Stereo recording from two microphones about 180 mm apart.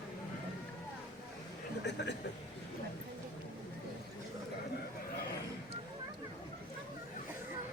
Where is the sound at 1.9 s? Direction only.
75° left (ahead or behind).